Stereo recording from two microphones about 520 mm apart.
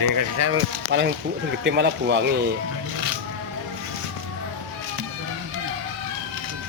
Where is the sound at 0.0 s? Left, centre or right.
Right; by 2.3 s centre.